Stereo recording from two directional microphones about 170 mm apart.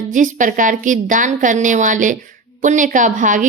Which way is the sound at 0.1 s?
50° right (ahead or behind).